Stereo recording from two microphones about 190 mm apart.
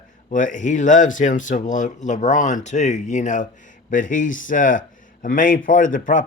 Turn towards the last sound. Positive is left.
turn(degrees=45)  # may be behind; listen again after turning